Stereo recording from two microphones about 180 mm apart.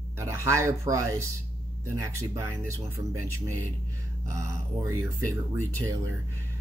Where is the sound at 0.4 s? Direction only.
15° right (ahead or behind).